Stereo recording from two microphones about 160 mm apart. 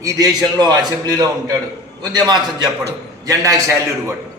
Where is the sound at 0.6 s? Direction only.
25° right (ahead or behind).